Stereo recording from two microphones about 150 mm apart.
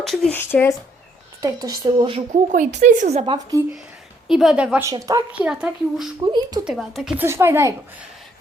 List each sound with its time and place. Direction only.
0.0 s speech: 5° left (ahead or behind)
1.6 s speech: 25° right (ahead or behind)
2.3 s a woman's voice: 55° right (ahead or behind)
3.2 s speech: 25° right (ahead or behind)
4.3 s speech: 5° right (ahead or behind)
4.8 s speech: 20° right (ahead or behind)
5.3 s a child's voice: 5° right (ahead or behind)
6.2 s speech: 30° right (ahead or behind)
6.7 s speech: centre (ahead or behind)
7.3 s a child's voice: 15° right (ahead or behind)